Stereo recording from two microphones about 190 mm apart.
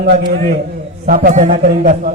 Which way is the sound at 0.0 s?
55° right (ahead or behind).